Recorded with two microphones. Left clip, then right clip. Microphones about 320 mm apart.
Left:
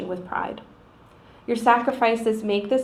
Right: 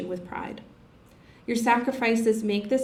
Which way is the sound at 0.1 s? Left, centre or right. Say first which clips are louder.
Left 6 dB; right.